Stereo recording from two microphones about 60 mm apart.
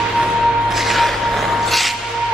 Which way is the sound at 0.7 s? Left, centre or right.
Centre.